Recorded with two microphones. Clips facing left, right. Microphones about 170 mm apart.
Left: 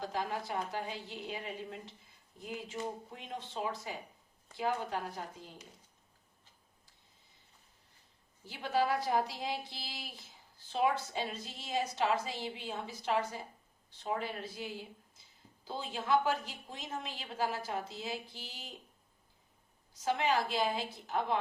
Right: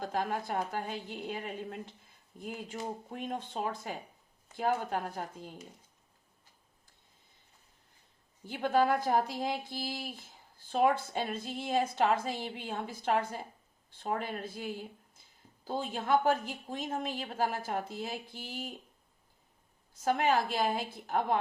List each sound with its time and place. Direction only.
0.0 s a woman's voice: 50° right (ahead or behind)
3.1 s a woman's voice: 50° right (ahead or behind)
8.4 s a woman's voice: 50° right (ahead or behind)
20.0 s a woman's voice: 50° right (ahead or behind)